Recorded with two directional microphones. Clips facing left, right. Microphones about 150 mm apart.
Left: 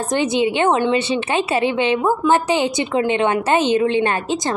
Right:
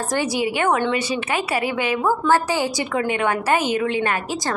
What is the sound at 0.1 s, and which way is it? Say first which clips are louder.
A woman's voice: left 5 dB; 20° left (ahead or behind).